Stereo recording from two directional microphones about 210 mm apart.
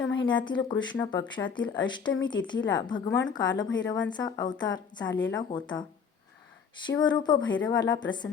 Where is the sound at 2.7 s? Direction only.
20° left (ahead or behind).